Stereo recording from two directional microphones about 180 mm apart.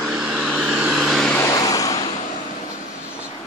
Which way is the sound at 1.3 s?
20° left (ahead or behind).